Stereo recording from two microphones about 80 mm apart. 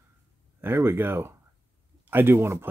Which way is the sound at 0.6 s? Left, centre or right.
Right.